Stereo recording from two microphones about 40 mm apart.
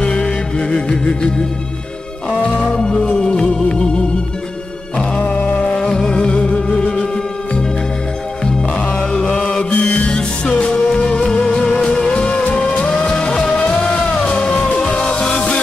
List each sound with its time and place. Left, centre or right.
0.0 s music: left
2.6 s music: centre
4.9 s music: left
5.8 s music: centre
8.7 s music: left
9.7 s music: left
10.0 s music: left
13.6 s music: left